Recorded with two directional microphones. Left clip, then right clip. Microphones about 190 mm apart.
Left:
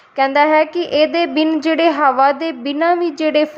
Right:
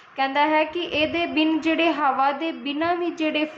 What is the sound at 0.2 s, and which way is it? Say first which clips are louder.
Speech: left 8 dB; 45° left (ahead or behind).